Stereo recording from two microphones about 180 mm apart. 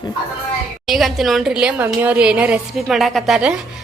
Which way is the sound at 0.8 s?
Centre (ahead or behind).